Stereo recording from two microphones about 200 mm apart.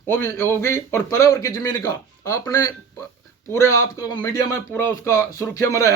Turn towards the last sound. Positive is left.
turn(degrees=15)  # may be behind; listen again after turning